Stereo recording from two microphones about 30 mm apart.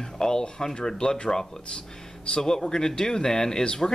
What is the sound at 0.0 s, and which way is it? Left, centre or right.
Speech, left.